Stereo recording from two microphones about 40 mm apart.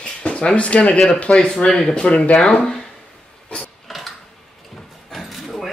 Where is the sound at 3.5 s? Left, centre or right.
Centre.